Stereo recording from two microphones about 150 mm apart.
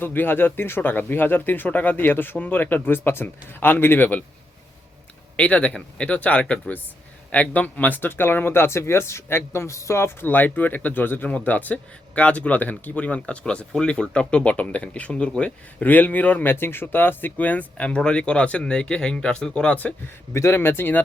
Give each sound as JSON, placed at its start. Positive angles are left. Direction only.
{"t": 0.0, "sound": "speech", "side_deg": 15}
{"t": 5.4, "sound": "speech", "side_deg": 10}